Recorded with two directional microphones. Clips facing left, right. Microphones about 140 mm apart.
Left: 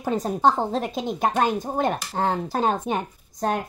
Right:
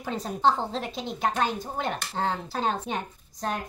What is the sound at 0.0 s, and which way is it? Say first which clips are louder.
Speech: left 4 dB; 45° left (ahead or behind).